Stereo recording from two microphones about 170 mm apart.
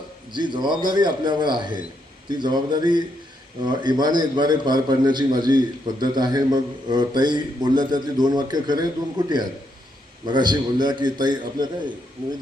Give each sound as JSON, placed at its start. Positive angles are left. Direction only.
{"t": 0.3, "sound": "a man's voice", "side_deg": -25}